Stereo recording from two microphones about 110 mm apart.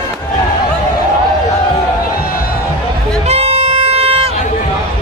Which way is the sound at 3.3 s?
75° right (ahead or behind).